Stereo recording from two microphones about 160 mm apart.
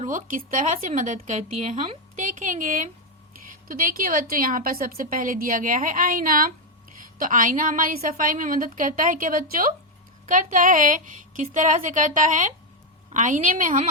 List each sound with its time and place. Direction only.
0.0 s a woman's voice: 55° right (ahead or behind)